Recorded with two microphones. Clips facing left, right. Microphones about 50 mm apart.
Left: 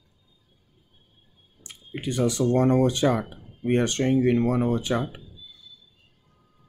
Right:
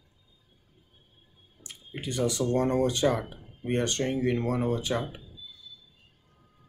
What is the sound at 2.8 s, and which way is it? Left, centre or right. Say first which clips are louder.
Speech: left 3 dB; left.